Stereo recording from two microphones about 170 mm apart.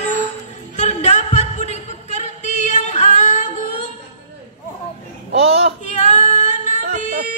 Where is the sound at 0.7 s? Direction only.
45° left (ahead or behind).